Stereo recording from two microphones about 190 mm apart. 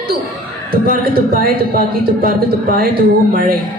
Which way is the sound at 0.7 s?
50° right (ahead or behind).